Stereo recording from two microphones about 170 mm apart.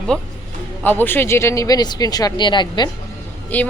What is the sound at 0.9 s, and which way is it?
Speech, 10° left (ahead or behind).